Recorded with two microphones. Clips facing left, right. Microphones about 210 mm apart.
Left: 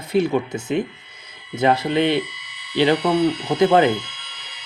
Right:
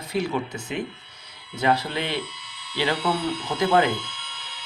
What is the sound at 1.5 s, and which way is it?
Speech, 20° left (ahead or behind).